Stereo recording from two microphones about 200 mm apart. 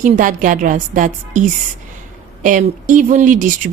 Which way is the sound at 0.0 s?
40° right (ahead or behind).